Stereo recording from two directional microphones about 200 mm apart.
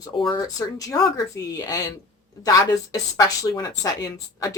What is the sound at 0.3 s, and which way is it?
Speech, 20° left (ahead or behind).